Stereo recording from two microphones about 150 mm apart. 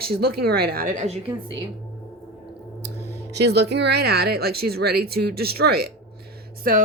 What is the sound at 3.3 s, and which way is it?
Speech, 90° right.